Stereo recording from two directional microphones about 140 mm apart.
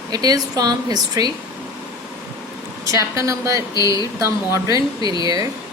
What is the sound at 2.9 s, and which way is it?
A woman's voice, 20° right (ahead or behind).